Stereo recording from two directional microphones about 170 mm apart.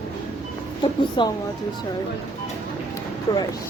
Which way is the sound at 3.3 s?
20° left (ahead or behind).